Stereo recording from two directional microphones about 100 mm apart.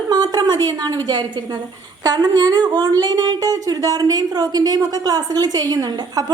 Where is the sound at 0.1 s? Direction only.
45° right (ahead or behind).